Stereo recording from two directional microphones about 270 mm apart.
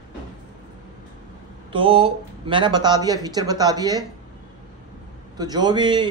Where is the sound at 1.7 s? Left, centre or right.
Centre.